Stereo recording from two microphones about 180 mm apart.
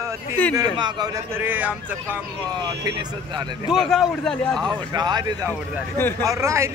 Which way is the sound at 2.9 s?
25° right (ahead or behind).